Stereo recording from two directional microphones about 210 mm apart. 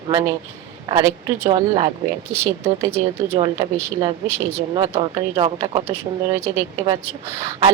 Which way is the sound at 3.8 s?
10° right (ahead or behind).